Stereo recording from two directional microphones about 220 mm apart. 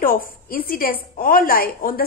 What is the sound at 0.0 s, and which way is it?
A woman's voice, 40° left (ahead or behind).